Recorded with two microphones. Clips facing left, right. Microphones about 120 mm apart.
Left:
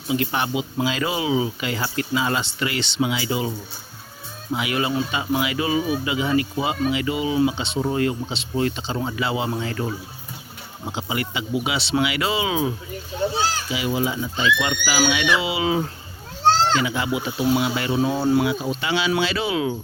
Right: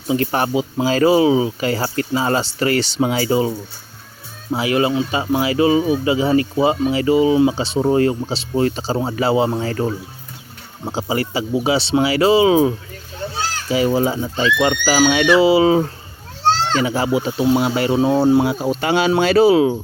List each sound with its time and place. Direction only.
0.1 s speech: 40° right (ahead or behind)
4.5 s speech: 30° right (ahead or behind)
13.1 s children playing: 15° left (ahead or behind)
13.7 s speech: 40° right (ahead or behind)
18.4 s speech: 45° right (ahead or behind)